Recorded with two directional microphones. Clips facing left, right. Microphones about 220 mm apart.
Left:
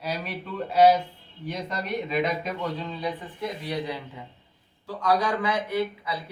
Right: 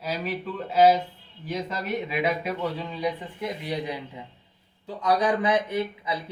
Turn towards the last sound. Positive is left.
turn(degrees=-20)  # may be behind; listen again after turning